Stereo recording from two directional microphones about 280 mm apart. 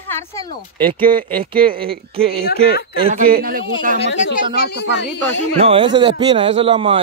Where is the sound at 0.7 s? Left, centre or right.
Centre.